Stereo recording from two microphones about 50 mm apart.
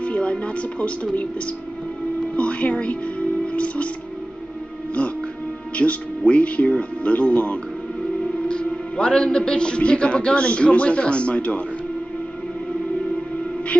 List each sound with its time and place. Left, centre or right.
0.0 s speech: left
2.3 s speech: left
3.5 s music: left
5.8 s a man's voice: left